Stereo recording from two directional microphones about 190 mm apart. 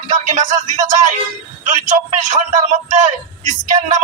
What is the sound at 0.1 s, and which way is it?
A man's voice, 40° right (ahead or behind).